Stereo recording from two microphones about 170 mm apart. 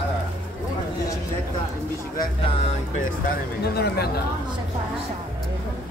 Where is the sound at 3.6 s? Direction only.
70° left (ahead or behind).